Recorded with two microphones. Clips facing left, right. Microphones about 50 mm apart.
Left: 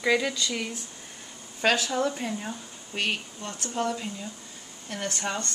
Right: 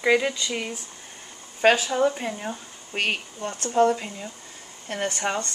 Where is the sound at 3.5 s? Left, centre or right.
Right.